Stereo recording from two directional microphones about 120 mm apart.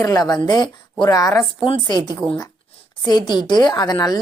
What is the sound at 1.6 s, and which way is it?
Speech, 40° left (ahead or behind).